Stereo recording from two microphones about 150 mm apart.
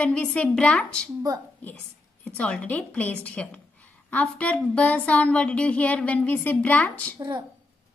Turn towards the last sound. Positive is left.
turn(degrees=-30)  # may be behind; listen again after turning